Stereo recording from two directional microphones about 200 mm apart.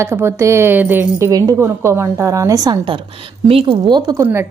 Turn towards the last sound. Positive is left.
turn(degrees=-15)  # may be behind; listen again after turning